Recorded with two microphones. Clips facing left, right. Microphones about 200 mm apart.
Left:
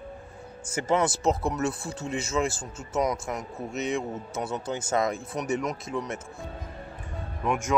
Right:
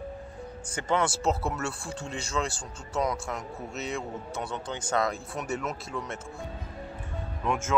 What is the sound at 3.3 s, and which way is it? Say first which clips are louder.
Speech: left 3 dB; centre (ahead or behind).